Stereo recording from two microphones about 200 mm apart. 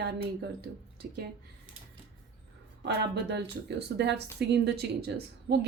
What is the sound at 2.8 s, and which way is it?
Speech, 60° right (ahead or behind).